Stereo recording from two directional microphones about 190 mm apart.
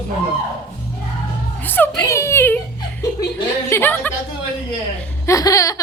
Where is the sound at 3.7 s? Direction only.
10° left (ahead or behind).